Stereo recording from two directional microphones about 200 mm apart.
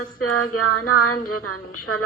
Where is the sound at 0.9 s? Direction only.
90° left.